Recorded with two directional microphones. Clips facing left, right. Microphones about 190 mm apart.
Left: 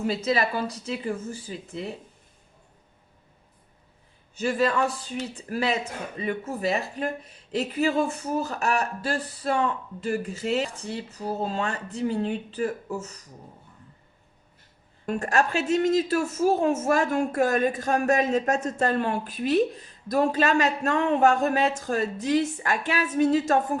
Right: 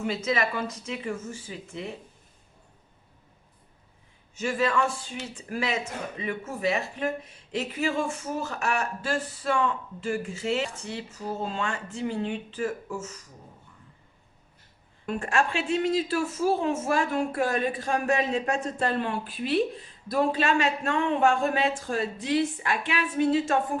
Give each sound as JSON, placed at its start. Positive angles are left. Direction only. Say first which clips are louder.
{"t": 0.0, "sound": "speech", "louder": "left 2 dB", "side_deg": 35}
{"t": 4.4, "sound": "speech", "louder": "left 2 dB", "side_deg": 35}
{"t": 15.0, "sound": "a woman's voice", "louder": "left 2 dB", "side_deg": 40}